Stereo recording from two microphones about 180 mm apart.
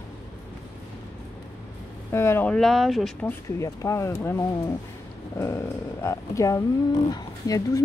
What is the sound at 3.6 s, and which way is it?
Speech, 15° left (ahead or behind).